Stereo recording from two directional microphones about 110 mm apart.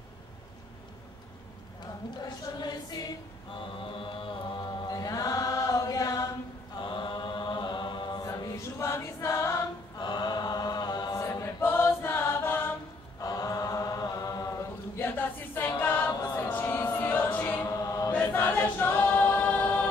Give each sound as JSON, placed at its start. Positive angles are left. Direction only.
{"t": 2.1, "sound": "music", "side_deg": 40}
{"t": 3.8, "sound": "chant", "side_deg": 50}
{"t": 6.8, "sound": "chant", "side_deg": 45}
{"t": 9.9, "sound": "choir", "side_deg": 40}
{"t": 13.2, "sound": "chant", "side_deg": 30}
{"t": 15.8, "sound": "choir", "side_deg": 20}
{"t": 18.1, "sound": "choir", "side_deg": 20}